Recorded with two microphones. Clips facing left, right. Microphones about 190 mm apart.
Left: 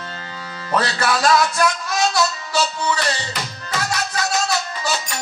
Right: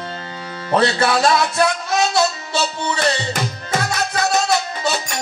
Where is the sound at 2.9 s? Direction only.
50° right (ahead or behind).